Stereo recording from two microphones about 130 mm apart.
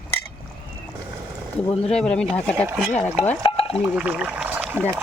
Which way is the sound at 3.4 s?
45° left (ahead or behind).